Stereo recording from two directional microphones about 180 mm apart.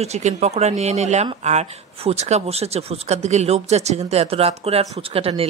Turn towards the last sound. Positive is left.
turn(degrees=-35)  # may be behind; listen again after turning